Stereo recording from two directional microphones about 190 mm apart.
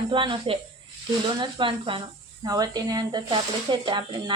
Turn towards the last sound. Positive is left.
turn(degrees=-25)  # may be behind; listen again after turning